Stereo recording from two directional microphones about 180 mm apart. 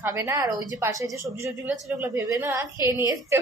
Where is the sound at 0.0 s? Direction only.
15° right (ahead or behind).